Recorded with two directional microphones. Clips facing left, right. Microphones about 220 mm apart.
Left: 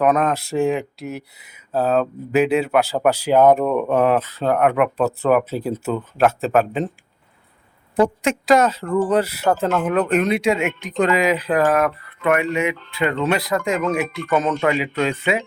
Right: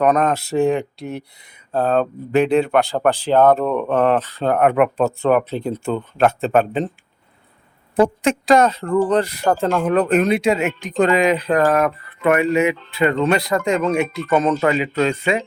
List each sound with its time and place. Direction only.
0.0 s speech: 5° left (ahead or behind)
8.2 s speech: centre (ahead or behind)
12.2 s speech: 35° right (ahead or behind)
12.5 s speech: centre (ahead or behind)